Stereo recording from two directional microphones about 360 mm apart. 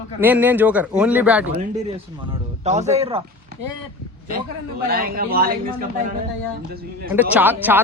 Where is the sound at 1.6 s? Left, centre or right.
Centre.